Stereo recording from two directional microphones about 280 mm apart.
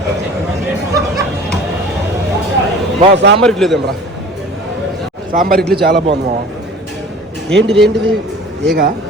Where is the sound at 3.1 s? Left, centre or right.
Right.